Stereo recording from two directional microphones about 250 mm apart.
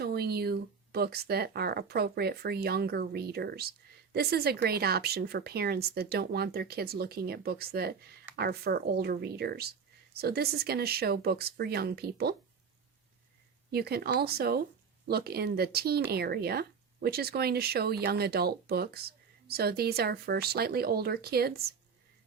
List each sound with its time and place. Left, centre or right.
0.0 s speech: right
13.7 s speech: right